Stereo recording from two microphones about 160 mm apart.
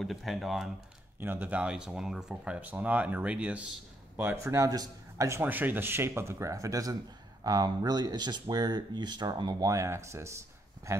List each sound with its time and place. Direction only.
0.0 s speech: centre (ahead or behind)
1.2 s a man's voice: 10° right (ahead or behind)